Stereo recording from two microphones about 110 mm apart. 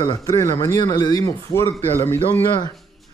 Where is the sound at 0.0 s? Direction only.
35° left (ahead or behind).